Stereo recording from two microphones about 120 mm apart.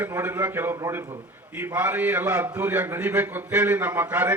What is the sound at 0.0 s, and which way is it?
A man's voice, 15° right (ahead or behind).